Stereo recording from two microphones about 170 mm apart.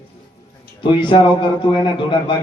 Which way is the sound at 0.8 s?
30° left (ahead or behind).